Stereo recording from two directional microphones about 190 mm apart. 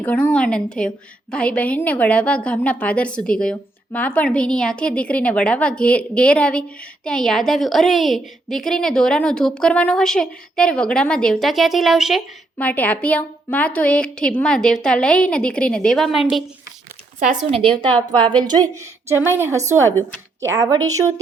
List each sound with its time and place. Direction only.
0.0 s a woman's voice: 5° left (ahead or behind)
17.2 s speech: 35° right (ahead or behind)
18.2 s a woman's voice: 25° right (ahead or behind)